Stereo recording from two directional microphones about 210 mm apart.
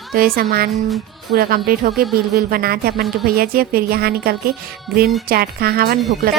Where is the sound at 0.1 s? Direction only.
45° right (ahead or behind).